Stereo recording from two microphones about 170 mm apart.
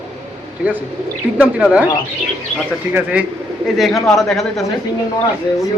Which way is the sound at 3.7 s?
Centre (ahead or behind).